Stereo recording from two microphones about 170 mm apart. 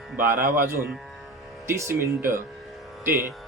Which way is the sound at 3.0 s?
10° right (ahead or behind).